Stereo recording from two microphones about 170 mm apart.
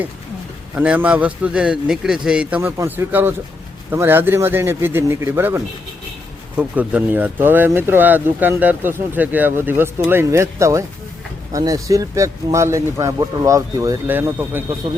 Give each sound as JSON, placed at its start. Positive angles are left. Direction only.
{"t": 0.8, "sound": "speech", "side_deg": -10}